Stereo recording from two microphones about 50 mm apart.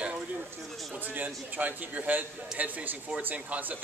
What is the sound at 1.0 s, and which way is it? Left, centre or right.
Speech, right.